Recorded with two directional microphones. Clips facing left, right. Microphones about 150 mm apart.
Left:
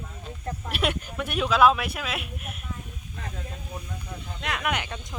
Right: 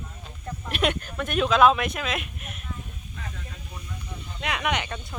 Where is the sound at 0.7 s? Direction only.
5° left (ahead or behind).